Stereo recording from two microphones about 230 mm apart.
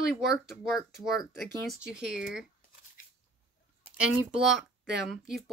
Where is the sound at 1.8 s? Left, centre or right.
Centre.